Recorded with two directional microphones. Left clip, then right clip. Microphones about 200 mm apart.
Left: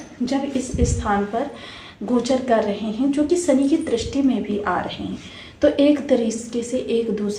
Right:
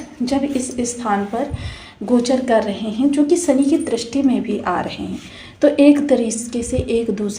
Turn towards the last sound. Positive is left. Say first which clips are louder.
# right 2 dB
turn(degrees=-25)  # may be behind; listen again after turning